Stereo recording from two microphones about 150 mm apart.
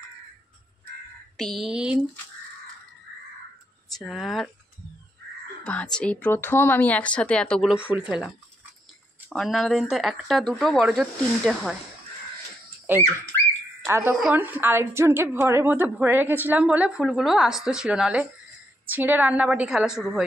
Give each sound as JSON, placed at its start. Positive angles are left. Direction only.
{"t": 1.3, "sound": "speech", "side_deg": 0}
{"t": 4.0, "sound": "speech", "side_deg": 0}
{"t": 5.7, "sound": "speech", "side_deg": 10}
{"t": 7.7, "sound": "a woman's voice", "side_deg": -10}
{"t": 9.3, "sound": "speech", "side_deg": 5}
{"t": 12.9, "sound": "a woman's voice", "side_deg": -10}